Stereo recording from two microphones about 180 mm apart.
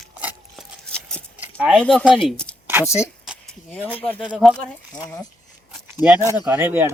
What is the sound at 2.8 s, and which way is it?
Speech, 15° left (ahead or behind).